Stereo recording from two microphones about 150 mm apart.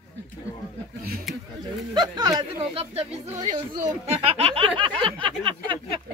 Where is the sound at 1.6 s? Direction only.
25° right (ahead or behind).